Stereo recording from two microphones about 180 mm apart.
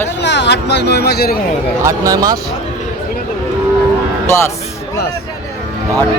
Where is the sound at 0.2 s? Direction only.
75° left (ahead or behind).